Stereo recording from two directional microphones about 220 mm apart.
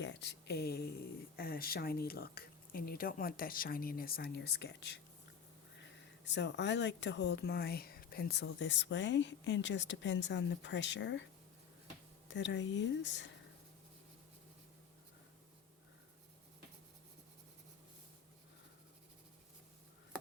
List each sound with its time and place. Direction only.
0.0 s speech: 50° left (ahead or behind)
12.3 s speech: 55° left (ahead or behind)